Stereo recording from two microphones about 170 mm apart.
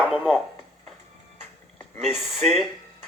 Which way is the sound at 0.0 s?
5° right (ahead or behind).